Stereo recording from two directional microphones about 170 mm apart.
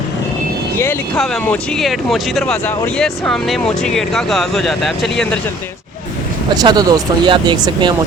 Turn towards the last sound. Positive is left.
turn(degrees=-30)  # may be behind; listen again after turning